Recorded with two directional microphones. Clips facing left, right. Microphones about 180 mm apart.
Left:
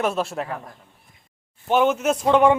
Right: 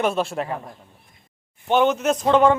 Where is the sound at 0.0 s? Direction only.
5° left (ahead or behind).